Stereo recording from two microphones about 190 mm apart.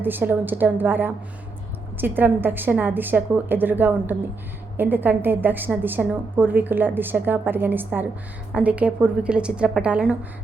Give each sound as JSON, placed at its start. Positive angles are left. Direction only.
{"t": 0.0, "sound": "a woman's voice", "side_deg": -10}